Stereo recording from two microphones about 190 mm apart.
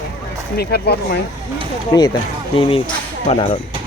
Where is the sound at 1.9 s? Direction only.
20° left (ahead or behind).